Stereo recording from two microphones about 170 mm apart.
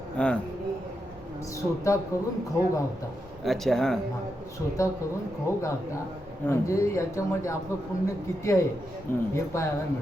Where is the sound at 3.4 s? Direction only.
Centre (ahead or behind).